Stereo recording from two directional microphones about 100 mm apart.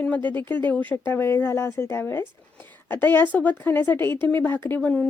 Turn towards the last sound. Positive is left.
turn(degrees=15)  # may be behind; listen again after turning